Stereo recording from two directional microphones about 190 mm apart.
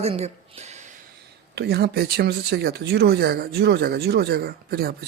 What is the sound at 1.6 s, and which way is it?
Speech, 60° right (ahead or behind).